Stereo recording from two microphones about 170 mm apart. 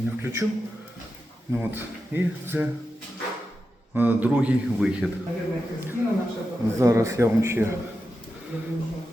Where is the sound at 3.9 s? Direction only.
10° right (ahead or behind).